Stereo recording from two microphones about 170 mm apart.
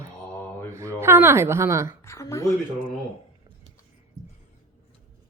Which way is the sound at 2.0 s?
15° left (ahead or behind).